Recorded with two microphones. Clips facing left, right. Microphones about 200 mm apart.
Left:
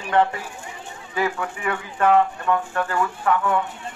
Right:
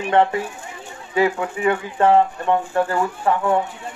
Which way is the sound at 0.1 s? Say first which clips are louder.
Right 2 dB; 25° right (ahead or behind).